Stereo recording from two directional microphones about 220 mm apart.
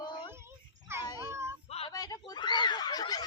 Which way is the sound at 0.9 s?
10° right (ahead or behind).